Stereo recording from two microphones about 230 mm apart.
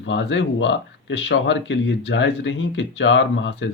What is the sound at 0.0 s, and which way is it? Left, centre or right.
Speech, left.